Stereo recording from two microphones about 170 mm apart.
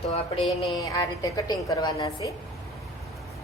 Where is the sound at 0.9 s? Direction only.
20° left (ahead or behind).